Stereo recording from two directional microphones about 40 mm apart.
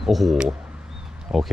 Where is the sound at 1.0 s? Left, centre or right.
Centre.